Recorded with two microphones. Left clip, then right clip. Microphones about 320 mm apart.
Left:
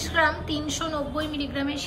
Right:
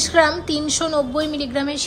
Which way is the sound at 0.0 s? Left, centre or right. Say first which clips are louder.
Right 7 dB; centre.